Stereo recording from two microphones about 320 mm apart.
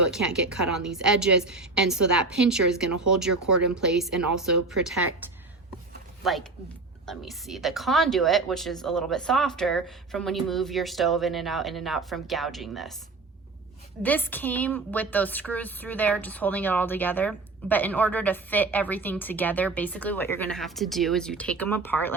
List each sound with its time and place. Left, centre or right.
0.1 s a woman's voice: centre
6.2 s a woman's voice: centre
14.0 s a woman's voice: centre